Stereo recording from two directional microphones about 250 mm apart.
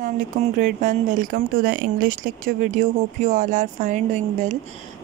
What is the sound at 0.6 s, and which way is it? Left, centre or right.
Speech, right.